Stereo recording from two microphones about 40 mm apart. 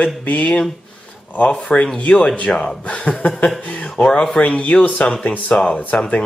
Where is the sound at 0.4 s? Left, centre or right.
Left.